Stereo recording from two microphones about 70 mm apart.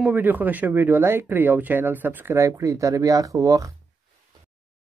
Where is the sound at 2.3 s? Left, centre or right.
Right.